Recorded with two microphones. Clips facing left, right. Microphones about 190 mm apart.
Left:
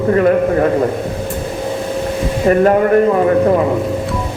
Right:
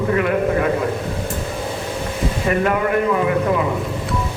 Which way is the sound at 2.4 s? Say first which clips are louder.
Left 8 dB; 40° left (ahead or behind).